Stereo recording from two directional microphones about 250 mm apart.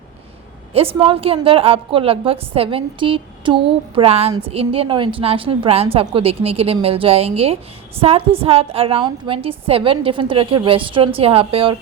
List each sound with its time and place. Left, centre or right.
0.7 s a woman's voice: right